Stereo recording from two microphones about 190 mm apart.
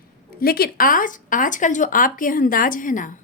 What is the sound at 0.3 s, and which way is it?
Speech, 50° left (ahead or behind).